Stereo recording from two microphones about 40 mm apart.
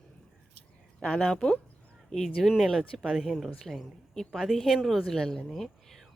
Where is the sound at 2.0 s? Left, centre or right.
Centre.